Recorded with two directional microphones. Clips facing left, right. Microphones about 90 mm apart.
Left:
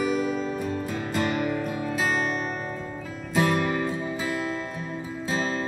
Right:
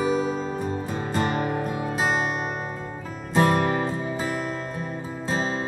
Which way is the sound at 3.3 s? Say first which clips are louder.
Right 3 dB; 40° right (ahead or behind).